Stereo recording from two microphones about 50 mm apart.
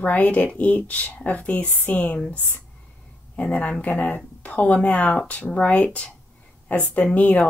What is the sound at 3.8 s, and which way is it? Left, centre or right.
Speech, left.